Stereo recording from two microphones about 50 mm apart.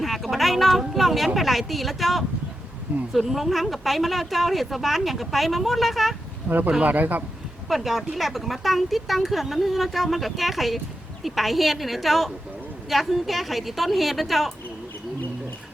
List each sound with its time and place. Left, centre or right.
0.0 s a woman's voice: centre
6.5 s speech: right
7.7 s a woman's voice: centre